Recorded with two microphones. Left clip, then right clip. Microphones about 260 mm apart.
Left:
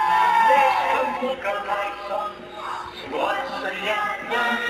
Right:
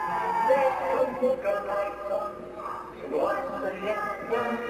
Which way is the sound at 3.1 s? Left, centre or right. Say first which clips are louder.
Left 3 dB; centre.